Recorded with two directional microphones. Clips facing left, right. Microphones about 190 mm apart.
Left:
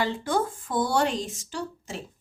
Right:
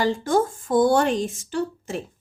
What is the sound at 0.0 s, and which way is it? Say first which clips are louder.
A woman's voice: right 5 dB; 45° right (ahead or behind).